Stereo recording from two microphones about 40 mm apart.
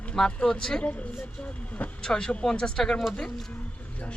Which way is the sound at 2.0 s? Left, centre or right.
Centre.